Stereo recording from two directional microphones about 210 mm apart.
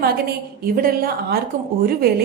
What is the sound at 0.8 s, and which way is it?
Speech, 45° right (ahead or behind).